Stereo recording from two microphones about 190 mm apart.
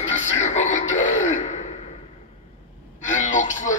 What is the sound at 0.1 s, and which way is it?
Music, 40° left (ahead or behind).